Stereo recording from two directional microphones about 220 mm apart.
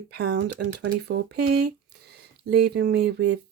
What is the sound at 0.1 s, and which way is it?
Speech, 50° right (ahead or behind).